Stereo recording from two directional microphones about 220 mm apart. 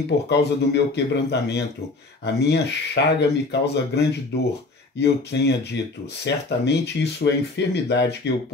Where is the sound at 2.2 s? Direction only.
50° left (ahead or behind).